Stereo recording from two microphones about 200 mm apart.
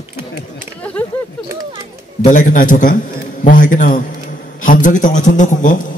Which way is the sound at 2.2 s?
40° left (ahead or behind).